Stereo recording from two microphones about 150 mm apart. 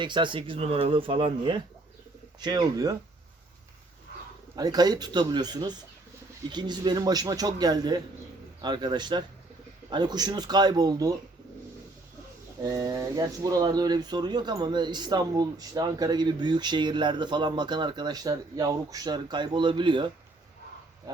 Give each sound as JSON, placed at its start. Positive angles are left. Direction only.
{"t": 0.0, "sound": "speech", "side_deg": -30}
{"t": 4.5, "sound": "speech", "side_deg": -25}
{"t": 12.6, "sound": "speech", "side_deg": -25}